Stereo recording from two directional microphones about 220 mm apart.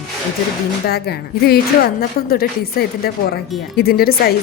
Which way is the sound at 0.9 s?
45° left (ahead or behind).